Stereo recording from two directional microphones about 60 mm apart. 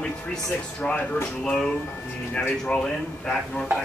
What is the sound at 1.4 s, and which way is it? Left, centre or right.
Speech, centre.